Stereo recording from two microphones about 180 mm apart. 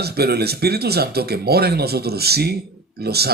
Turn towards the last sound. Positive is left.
turn(degrees=-60)  # may be behind; listen again after turning